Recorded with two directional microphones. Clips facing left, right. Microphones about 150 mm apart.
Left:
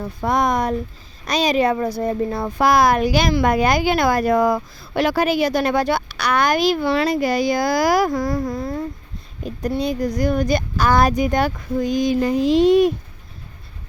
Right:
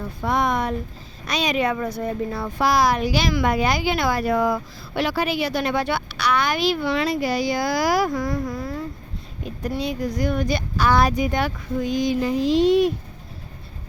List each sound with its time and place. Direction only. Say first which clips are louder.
0.2 s speech: left 3 dB; 40° left (ahead or behind)
9.8 s speech: left 3 dB; 40° left (ahead or behind)